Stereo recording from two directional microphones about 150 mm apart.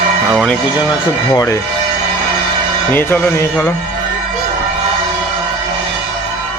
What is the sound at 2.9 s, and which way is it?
Speech, 15° left (ahead or behind).